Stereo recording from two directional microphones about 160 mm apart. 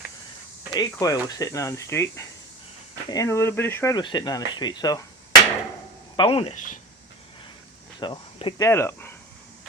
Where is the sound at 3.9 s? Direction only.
25° left (ahead or behind).